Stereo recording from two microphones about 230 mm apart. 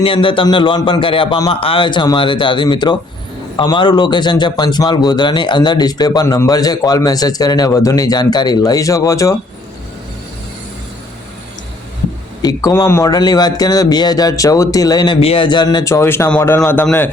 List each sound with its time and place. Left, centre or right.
0.0 s a man's voice: left
12.4 s speech: centre